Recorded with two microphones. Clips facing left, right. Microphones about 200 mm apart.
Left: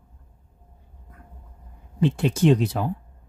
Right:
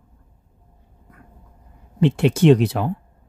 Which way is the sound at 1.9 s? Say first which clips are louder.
Right 4 dB; 75° right (ahead or behind).